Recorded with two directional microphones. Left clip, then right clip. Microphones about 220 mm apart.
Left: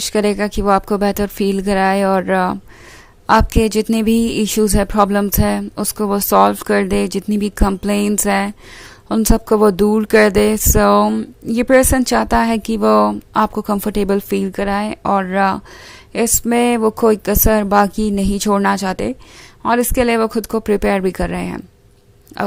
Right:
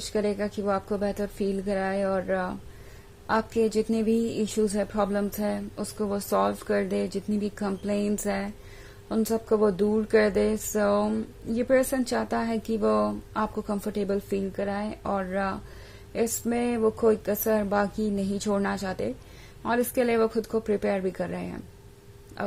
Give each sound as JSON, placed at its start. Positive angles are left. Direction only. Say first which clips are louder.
{"t": 0.1, "sound": "speech", "louder": "left 10 dB", "side_deg": 35}